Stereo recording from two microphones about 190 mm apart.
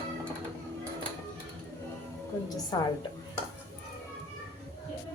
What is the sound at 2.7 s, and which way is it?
Speech, 20° left (ahead or behind).